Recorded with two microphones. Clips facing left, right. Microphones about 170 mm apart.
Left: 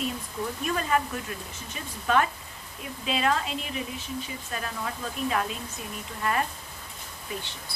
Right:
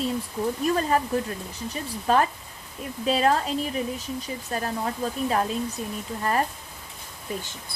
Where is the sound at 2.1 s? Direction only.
35° right (ahead or behind).